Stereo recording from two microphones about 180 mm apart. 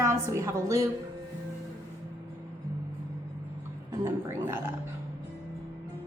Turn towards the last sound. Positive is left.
turn(degrees=-15)  # may be behind; listen again after turning